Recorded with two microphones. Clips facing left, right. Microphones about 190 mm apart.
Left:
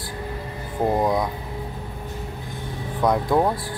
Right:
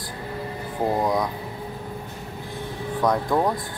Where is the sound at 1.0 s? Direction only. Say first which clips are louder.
Left 1 dB; centre (ahead or behind).